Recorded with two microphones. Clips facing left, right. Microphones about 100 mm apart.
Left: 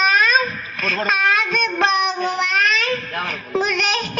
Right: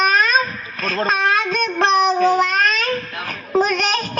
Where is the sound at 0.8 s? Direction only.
35° right (ahead or behind).